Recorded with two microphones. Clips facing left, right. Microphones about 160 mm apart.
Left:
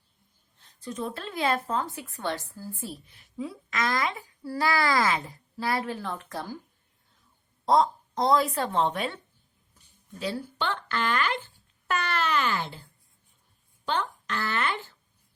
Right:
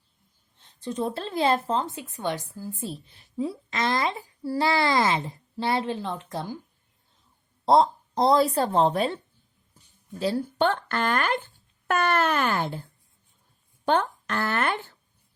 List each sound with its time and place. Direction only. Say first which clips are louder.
0.6 s a woman's voice: right 5 dB; 30° right (ahead or behind)
7.6 s a woman's voice: right 3 dB; 30° right (ahead or behind); by 12.8 s 55° right (ahead or behind)
13.8 s speech: right 6 dB; 50° right (ahead or behind)